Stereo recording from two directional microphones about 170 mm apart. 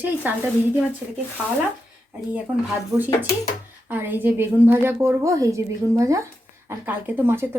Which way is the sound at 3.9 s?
10° right (ahead or behind).